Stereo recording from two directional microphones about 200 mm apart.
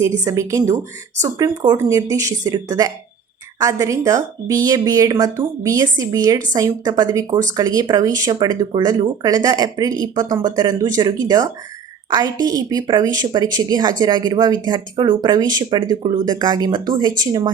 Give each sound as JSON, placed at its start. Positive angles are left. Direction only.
{"t": 0.3, "sound": "speech", "side_deg": -15}